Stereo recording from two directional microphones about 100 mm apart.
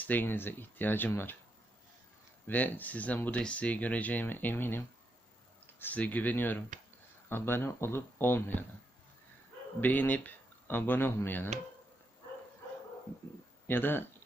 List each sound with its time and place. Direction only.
0.0 s speech: 20° left (ahead or behind)
2.5 s speech: 20° left (ahead or behind)
5.8 s speech: 15° left (ahead or behind)
9.8 s speech: 15° left (ahead or behind)
13.7 s speech: 20° left (ahead or behind)